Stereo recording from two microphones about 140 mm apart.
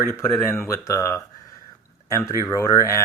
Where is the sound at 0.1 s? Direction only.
15° left (ahead or behind).